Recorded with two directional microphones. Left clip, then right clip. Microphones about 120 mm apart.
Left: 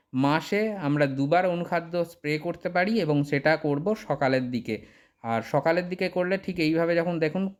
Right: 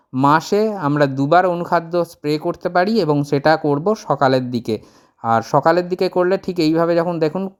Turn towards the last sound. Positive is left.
turn(degrees=-40)  # may be behind; listen again after turning